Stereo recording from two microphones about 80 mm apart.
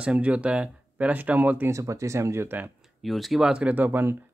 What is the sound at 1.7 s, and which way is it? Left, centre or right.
Speech, right.